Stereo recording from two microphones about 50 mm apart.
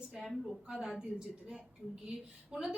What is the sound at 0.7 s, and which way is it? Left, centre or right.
A woman's voice, centre.